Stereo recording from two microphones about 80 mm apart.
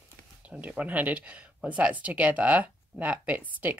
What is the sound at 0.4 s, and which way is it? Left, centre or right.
Speech, centre.